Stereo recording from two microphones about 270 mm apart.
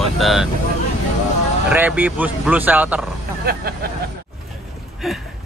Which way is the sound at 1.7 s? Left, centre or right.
Centre.